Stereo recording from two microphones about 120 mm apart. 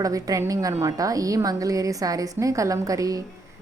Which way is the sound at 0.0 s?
30° right (ahead or behind).